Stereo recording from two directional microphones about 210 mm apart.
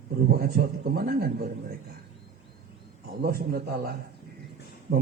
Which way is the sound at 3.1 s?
45° right (ahead or behind).